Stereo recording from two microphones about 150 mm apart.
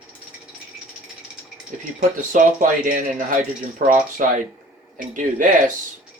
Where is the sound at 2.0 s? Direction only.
60° right (ahead or behind).